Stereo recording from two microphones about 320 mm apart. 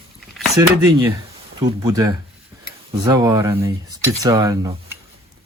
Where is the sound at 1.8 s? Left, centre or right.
Centre.